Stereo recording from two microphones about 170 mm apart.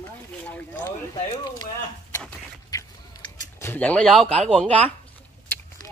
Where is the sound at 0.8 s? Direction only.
25° left (ahead or behind).